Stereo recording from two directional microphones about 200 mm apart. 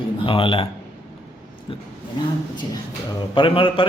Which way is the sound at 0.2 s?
25° left (ahead or behind).